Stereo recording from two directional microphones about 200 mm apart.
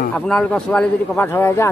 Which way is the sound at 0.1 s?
5° left (ahead or behind).